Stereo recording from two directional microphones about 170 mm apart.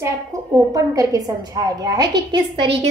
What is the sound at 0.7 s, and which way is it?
A woman's voice, 20° right (ahead or behind).